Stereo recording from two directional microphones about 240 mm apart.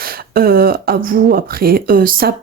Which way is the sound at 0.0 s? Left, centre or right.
Right.